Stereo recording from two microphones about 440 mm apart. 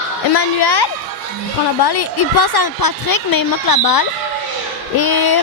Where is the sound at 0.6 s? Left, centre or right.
Left.